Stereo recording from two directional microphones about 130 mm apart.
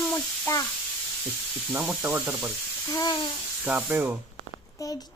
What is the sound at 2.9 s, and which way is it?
Electric toothbrush, 35° left (ahead or behind).